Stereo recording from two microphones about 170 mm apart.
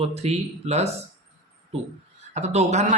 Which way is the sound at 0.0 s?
40° right (ahead or behind).